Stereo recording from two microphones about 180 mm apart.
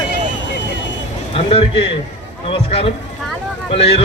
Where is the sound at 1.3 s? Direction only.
30° left (ahead or behind).